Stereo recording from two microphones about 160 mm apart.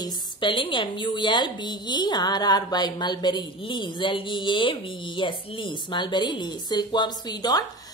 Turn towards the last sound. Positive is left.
turn(degrees=25)  # may be behind; listen again after turning